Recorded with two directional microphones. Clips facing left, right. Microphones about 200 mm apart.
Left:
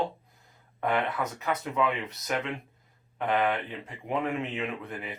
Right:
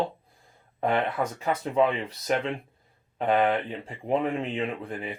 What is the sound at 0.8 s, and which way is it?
Speech, 30° right (ahead or behind).